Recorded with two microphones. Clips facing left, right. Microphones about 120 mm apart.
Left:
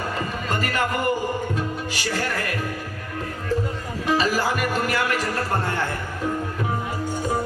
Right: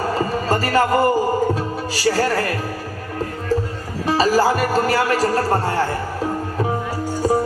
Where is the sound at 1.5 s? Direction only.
35° right (ahead or behind).